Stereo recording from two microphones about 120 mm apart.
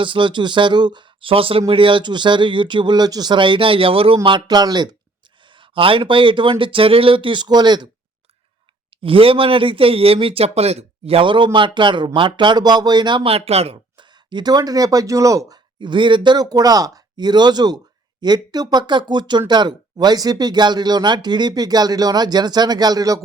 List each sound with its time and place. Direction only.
0.0 s speech: 45° right (ahead or behind)
5.5 s speech: 45° right (ahead or behind)
9.0 s speech: 50° right (ahead or behind)
13.9 s speech: 40° right (ahead or behind)